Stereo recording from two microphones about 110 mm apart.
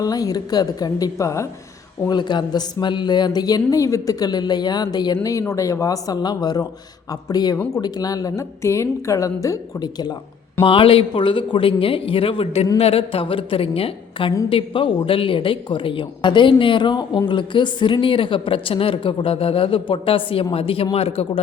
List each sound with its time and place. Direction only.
0.0 s speech: 35° left (ahead or behind)
2.0 s speech: 45° left (ahead or behind)
10.6 s a man's voice: 55° left (ahead or behind)